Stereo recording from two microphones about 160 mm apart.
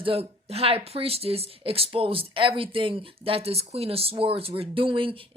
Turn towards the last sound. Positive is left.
turn(degrees=-35)  # may be behind; listen again after turning